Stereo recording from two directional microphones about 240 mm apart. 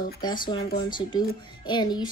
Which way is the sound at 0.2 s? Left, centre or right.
Centre.